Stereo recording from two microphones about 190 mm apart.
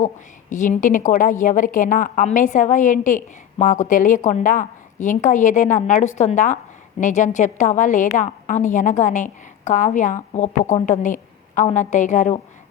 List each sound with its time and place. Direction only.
0.5 s a woman's voice: 40° left (ahead or behind)